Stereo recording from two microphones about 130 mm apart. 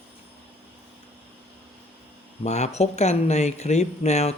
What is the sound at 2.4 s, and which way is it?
Speech, 60° left (ahead or behind).